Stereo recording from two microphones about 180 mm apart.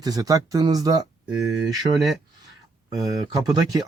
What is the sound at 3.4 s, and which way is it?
Speech, 20° right (ahead or behind).